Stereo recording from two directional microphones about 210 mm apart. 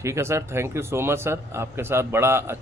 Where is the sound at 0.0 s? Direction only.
15° right (ahead or behind).